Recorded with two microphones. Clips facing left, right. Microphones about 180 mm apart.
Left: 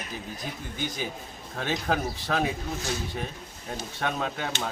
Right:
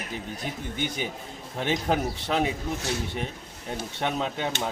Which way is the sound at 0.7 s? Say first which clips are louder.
Even; 20° right (ahead or behind).